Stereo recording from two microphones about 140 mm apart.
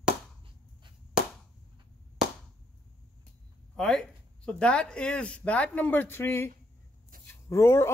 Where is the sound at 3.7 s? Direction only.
5° left (ahead or behind).